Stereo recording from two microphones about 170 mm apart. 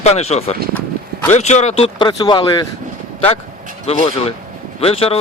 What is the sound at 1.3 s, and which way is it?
A man's voice, 40° left (ahead or behind).